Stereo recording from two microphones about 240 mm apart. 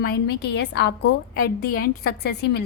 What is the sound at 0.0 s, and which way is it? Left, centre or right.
A woman's voice, left.